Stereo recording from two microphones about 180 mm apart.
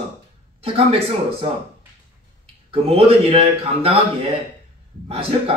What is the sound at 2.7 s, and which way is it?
Speech, 30° right (ahead or behind).